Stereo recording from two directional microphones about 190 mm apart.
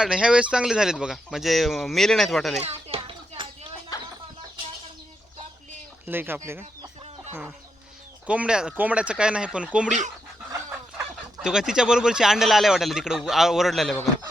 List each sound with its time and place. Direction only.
0.0 s speech: 5° right (ahead or behind)
2.6 s a sound: 30° right (ahead or behind)
6.1 s speech: 10° right (ahead or behind)
8.3 s speech: 5° right (ahead or behind)
10.5 s a sound: 10° right (ahead or behind)
11.3 s speech: 5° right (ahead or behind)